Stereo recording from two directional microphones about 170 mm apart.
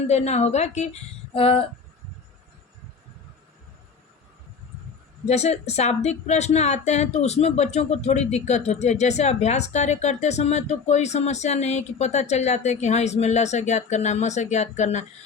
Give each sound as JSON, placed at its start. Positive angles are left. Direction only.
{"t": 0.1, "sound": "speech", "side_deg": 40}
{"t": 5.2, "sound": "speech", "side_deg": 40}